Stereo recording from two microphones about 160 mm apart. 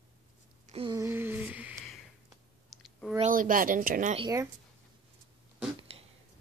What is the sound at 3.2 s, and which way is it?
Speech, 60° right (ahead or behind).